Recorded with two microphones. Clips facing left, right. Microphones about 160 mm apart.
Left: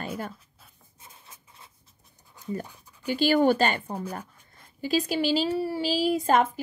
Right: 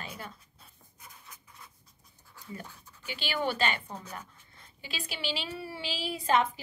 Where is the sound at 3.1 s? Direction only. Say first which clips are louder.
Left 12 dB; 45° left (ahead or behind).